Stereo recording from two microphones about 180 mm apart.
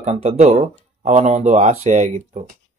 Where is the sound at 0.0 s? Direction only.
35° right (ahead or behind).